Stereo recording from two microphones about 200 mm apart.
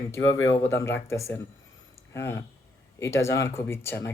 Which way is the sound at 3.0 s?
15° left (ahead or behind).